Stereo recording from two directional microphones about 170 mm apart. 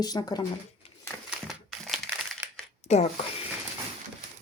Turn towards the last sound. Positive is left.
turn(degrees=40)  # may be behind; listen again after turning